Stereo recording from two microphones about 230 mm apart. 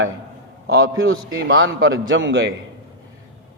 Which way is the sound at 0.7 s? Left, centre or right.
Right.